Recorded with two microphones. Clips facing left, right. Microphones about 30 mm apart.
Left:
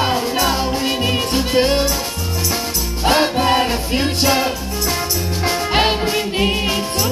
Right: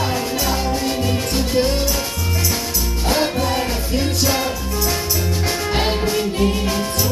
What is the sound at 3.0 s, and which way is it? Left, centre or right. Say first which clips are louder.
Music: left 5 dB; left.